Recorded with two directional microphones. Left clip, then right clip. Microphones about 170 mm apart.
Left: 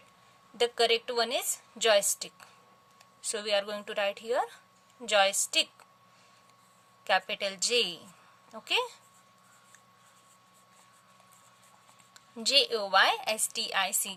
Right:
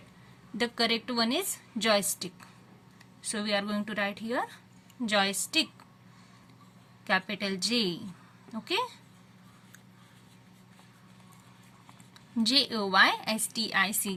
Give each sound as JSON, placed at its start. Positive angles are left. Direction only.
{"t": 0.5, "sound": "a woman's voice", "side_deg": 40}
{"t": 7.0, "sound": "a woman's voice", "side_deg": 40}
{"t": 12.4, "sound": "a woman's voice", "side_deg": 40}